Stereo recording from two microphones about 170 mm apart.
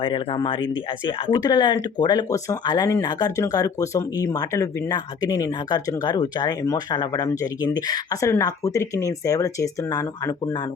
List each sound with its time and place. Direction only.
0.0 s speech: 30° left (ahead or behind)